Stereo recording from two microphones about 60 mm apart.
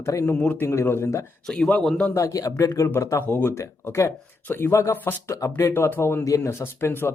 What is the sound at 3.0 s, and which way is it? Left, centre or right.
Speech, left.